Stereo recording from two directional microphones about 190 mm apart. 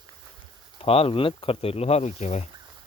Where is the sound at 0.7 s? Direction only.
30° left (ahead or behind).